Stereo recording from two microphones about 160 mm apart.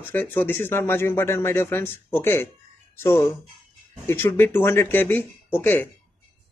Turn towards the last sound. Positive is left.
turn(degrees=10)  # may be behind; listen again after turning